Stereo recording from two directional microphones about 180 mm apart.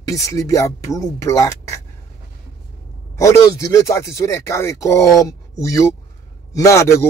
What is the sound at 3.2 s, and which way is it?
A man's voice, 15° left (ahead or behind).